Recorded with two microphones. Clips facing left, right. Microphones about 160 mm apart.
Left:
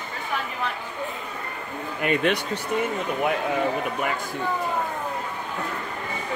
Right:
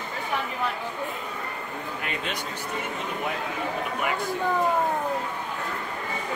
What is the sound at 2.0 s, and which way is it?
Speech, 65° left (ahead or behind).